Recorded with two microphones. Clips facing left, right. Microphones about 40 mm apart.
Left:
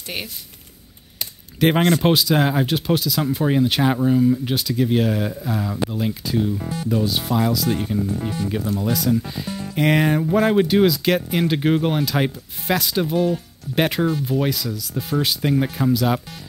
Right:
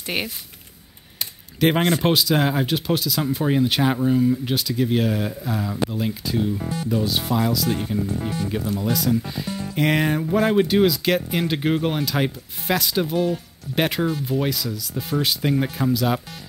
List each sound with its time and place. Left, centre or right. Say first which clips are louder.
0.0 s speech: right 4 dB; centre
1.2 s a sound: left 1 dB; centre
2.0 s speech: left 2 dB; centre